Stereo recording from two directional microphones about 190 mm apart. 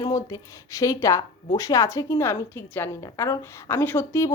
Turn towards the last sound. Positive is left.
turn(degrees=15)  # may be behind; listen again after turning